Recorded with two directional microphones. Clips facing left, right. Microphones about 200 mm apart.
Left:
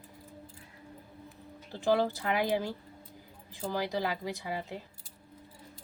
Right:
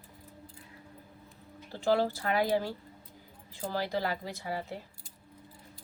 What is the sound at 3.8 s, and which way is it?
Speech, 15° left (ahead or behind).